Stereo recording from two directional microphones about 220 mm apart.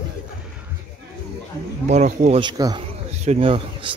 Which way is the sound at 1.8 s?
30° right (ahead or behind).